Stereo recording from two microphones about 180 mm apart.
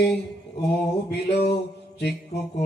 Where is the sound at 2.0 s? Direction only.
65° left (ahead or behind).